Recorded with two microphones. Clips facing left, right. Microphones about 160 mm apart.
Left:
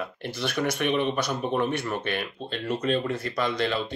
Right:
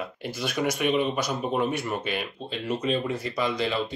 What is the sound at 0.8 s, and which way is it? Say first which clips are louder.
Speech: right 1 dB; 10° right (ahead or behind).